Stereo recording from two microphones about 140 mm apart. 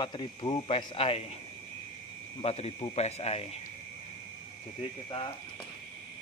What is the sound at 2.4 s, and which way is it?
Speech, 45° left (ahead or behind).